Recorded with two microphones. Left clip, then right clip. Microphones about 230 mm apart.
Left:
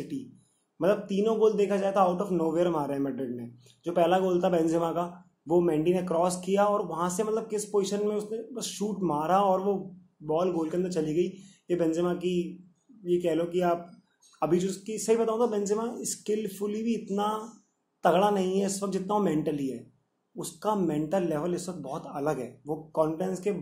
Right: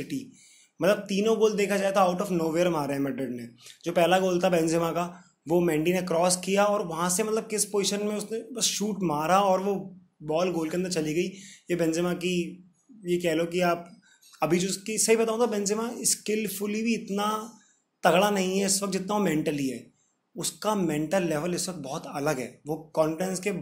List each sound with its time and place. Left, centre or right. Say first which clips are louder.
0.1 s a man's voice: right 2 dB; right